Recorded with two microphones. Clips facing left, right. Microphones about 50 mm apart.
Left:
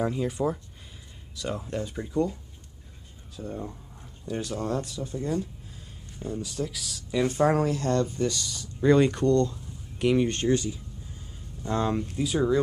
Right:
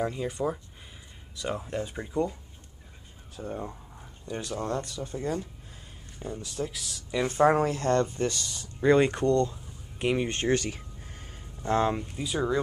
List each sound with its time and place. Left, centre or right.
0.0 s speech: centre
1.3 s speech: centre
3.5 s a sound: centre
4.6 s speech: centre
6.1 s speech: centre
7.2 s speech: right
8.5 s speech: centre
10.5 s a sound: right
11.6 s speech: right
11.9 s speech: centre